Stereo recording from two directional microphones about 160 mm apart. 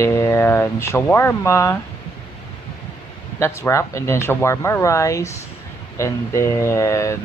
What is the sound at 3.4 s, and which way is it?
Speech, 15° left (ahead or behind).